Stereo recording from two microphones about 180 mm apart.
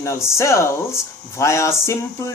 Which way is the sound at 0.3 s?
15° left (ahead or behind).